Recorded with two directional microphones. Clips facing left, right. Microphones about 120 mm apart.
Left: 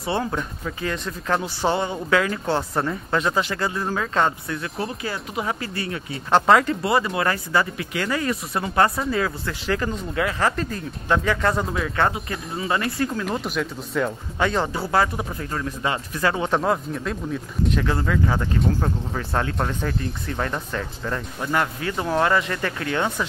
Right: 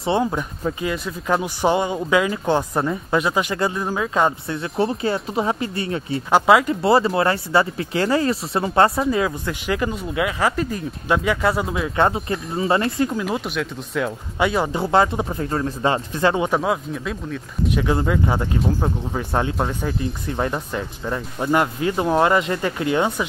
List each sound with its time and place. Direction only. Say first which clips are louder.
0.0 s speech: right 4 dB; 15° right (ahead or behind)
4.5 s speech: right 6 dB; 25° right (ahead or behind)
6.3 s speech: right 1 dB; 5° right (ahead or behind)
6.8 s speech: right 5 dB; 30° right (ahead or behind)
9.1 s speech: right 3 dB; 15° right (ahead or behind)
12.0 s speech: right 5 dB; 25° right (ahead or behind)
13.2 s speech: right 1 dB; centre (ahead or behind)
14.4 s speech: right 3 dB; 10° right (ahead or behind)
16.4 s speech: right 1 dB; 5° right (ahead or behind)
17.8 s speech: right 3 dB; 20° right (ahead or behind)